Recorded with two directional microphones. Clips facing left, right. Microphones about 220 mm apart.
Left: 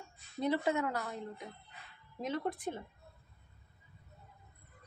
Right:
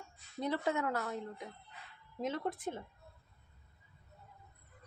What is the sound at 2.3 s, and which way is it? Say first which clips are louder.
Speech: left 5 dB; 15° left (ahead or behind).